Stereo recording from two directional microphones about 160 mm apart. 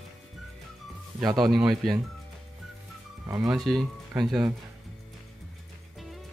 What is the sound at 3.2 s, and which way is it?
Speech, 20° right (ahead or behind).